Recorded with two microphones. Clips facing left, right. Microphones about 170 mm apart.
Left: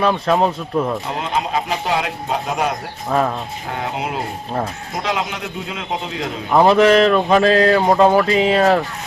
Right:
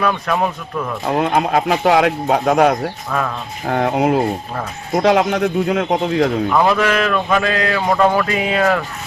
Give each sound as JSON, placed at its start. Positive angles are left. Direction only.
{"t": 0.0, "sound": "a man's voice", "side_deg": 25}
{"t": 1.0, "sound": "speech", "side_deg": -60}
{"t": 2.0, "sound": "speech", "side_deg": -50}
{"t": 3.1, "sound": "a man's voice", "side_deg": 30}
{"t": 3.7, "sound": "speech", "side_deg": -60}
{"t": 6.5, "sound": "speech", "side_deg": 25}
{"t": 7.8, "sound": "a man's voice", "side_deg": 20}